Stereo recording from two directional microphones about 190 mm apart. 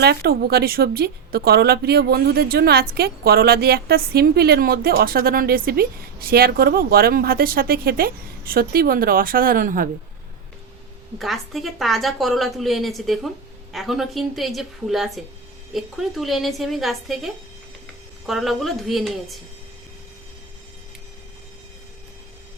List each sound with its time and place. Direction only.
0.0 s a woman's voice: 55° right (ahead or behind)
11.2 s a woman's voice: centre (ahead or behind)